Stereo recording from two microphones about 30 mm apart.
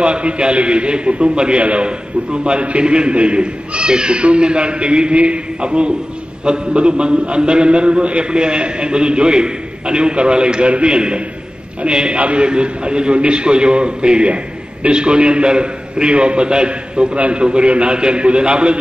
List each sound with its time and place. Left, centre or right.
0.0 s a man's voice: right
12.2 s a man's voice: right
12.4 s a man's voice: right